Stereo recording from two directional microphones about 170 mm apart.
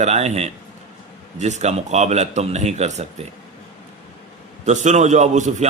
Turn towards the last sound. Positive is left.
turn(degrees=-45)  # may be behind; listen again after turning